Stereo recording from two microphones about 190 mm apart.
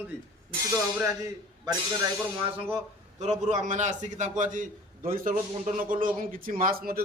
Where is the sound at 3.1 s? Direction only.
35° right (ahead or behind).